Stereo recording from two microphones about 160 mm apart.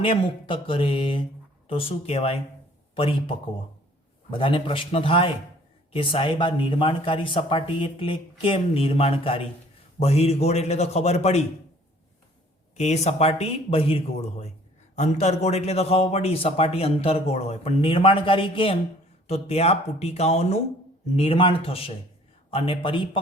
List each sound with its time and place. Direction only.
0.0 s a man's voice: 35° left (ahead or behind)
12.7 s a man's voice: 45° left (ahead or behind)